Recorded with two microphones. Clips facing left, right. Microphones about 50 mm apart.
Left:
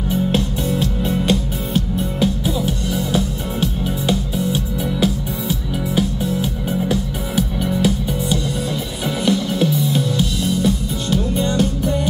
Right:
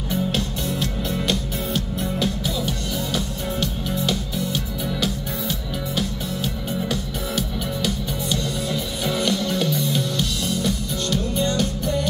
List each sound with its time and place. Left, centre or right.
0.1 s music: centre